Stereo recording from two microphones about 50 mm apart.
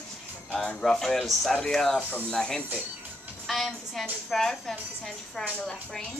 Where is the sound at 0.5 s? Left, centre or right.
Centre.